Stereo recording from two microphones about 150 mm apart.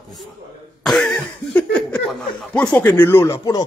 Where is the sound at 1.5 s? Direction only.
10° left (ahead or behind).